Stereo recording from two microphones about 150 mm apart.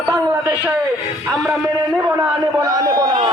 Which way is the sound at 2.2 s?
25° right (ahead or behind).